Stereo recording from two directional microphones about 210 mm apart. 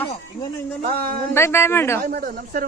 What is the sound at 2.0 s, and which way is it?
Speech, 45° right (ahead or behind).